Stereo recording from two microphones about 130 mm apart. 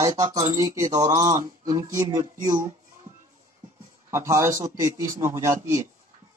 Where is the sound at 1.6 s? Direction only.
25° right (ahead or behind).